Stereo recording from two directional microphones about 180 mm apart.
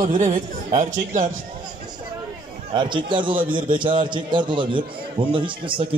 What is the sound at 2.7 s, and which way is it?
A man's voice, 25° right (ahead or behind).